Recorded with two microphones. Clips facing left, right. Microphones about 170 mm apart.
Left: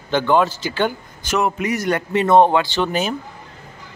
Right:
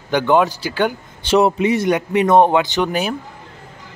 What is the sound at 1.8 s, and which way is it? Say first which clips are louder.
A man's voice: right 2 dB; 15° right (ahead or behind).